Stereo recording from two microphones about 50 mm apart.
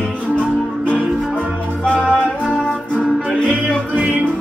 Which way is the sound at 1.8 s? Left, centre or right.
Left.